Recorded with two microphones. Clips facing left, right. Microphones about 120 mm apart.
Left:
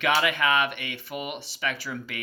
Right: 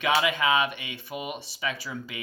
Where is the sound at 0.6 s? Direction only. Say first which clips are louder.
Left 1 dB; 65° left (ahead or behind).